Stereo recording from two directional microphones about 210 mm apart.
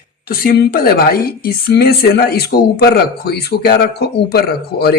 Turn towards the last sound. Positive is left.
turn(degrees=50)  # may be behind; listen again after turning